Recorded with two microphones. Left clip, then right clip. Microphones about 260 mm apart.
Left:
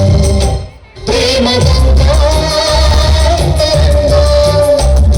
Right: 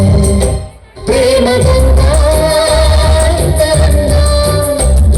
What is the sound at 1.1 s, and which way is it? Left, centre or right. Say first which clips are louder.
Music: right 2 dB; centre.